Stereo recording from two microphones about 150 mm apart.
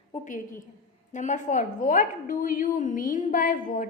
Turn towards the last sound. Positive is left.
turn(degrees=65)  # may be behind; listen again after turning